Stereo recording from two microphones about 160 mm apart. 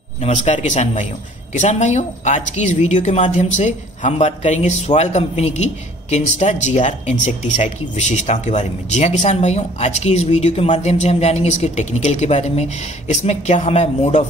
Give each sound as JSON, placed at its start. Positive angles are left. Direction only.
{"t": 0.2, "sound": "speech", "side_deg": 45}